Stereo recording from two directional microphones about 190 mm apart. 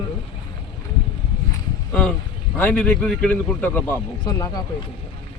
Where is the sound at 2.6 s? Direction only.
10° left (ahead or behind).